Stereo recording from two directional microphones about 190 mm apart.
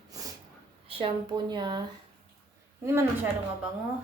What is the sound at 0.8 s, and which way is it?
Speech, 30° right (ahead or behind).